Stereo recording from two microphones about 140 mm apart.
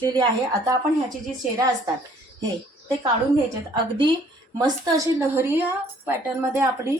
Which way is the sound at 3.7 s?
35° right (ahead or behind).